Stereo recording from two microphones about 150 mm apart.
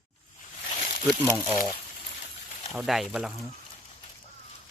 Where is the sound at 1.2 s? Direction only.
20° left (ahead or behind).